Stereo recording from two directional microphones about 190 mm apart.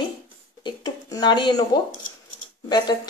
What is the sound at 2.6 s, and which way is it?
Speech, 20° left (ahead or behind).